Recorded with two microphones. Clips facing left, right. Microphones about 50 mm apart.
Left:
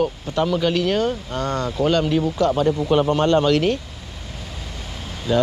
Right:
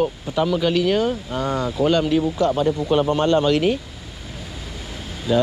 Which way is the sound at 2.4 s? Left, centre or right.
Left.